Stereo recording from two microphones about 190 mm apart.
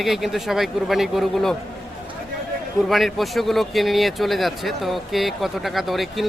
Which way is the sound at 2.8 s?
Centre (ahead or behind).